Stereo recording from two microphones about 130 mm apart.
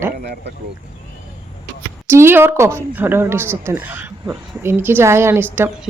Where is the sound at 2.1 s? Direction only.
20° right (ahead or behind).